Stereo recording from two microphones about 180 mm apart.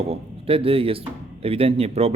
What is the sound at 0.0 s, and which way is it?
Speech, 35° right (ahead or behind).